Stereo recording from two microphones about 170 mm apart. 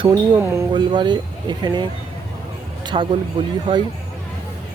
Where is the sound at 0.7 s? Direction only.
25° right (ahead or behind).